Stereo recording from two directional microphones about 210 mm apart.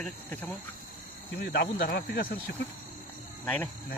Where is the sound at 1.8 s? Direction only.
45° left (ahead or behind).